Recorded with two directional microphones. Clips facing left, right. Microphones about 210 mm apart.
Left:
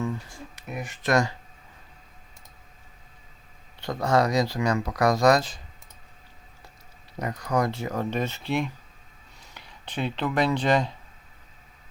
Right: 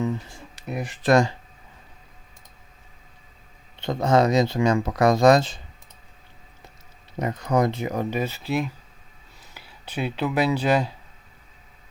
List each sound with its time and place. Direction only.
0.0 s speech: 25° right (ahead or behind)
3.8 s speech: 25° right (ahead or behind)
7.2 s speech: 25° right (ahead or behind); by 10.9 s 5° right (ahead or behind)